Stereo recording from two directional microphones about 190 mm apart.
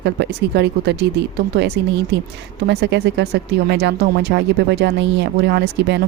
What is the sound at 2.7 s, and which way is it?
Speech, 60° right (ahead or behind).